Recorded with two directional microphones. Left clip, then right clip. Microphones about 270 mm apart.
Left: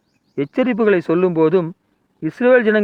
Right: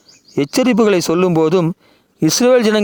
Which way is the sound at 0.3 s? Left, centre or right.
Right.